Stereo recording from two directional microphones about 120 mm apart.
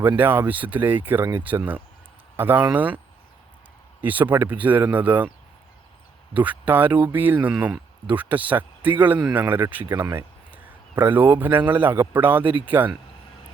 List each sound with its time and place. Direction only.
0.2 s speech: 15° right (ahead or behind)
4.0 s speech: 15° right (ahead or behind)
6.3 s a man's voice: 15° right (ahead or behind)